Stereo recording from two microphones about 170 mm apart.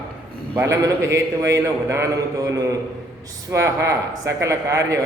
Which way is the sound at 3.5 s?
15° right (ahead or behind).